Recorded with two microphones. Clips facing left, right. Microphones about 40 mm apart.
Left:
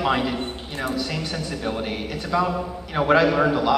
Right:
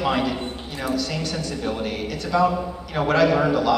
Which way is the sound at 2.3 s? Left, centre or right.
Centre.